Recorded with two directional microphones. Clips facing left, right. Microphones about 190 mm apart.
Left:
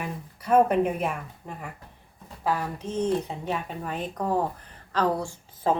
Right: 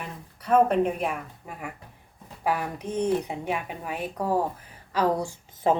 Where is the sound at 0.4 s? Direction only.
5° left (ahead or behind).